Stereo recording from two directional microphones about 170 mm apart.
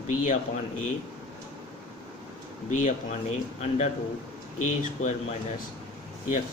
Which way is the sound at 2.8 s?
40° left (ahead or behind).